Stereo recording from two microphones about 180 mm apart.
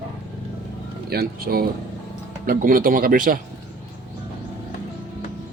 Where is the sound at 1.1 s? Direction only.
60° right (ahead or behind).